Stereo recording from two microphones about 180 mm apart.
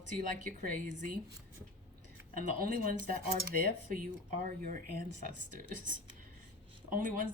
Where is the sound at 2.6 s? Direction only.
50° right (ahead or behind).